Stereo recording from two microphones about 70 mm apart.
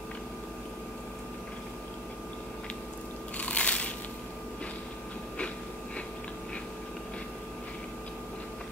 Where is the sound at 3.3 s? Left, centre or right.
Centre.